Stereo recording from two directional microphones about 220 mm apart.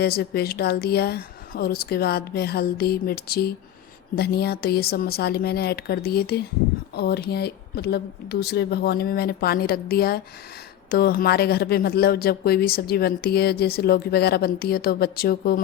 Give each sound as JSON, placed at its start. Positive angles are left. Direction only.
{"t": 0.0, "sound": "speech", "side_deg": 45}